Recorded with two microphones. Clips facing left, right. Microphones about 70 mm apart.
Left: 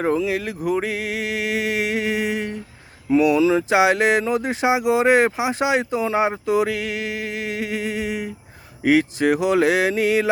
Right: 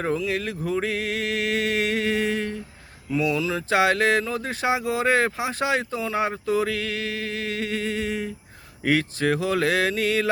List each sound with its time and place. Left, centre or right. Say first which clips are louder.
0.0 s speech: left 4 dB; centre